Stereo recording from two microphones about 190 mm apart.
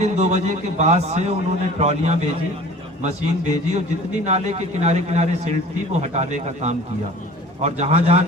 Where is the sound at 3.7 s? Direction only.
35° right (ahead or behind).